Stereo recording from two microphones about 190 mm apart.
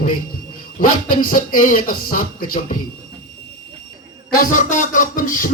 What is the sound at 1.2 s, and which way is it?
Speech, 45° left (ahead or behind).